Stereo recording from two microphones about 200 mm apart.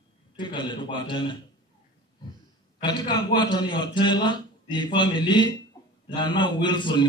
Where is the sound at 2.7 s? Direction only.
20° left (ahead or behind).